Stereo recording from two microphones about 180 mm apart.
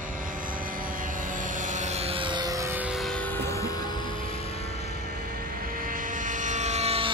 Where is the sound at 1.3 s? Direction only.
45° right (ahead or behind); by 3.4 s 5° left (ahead or behind).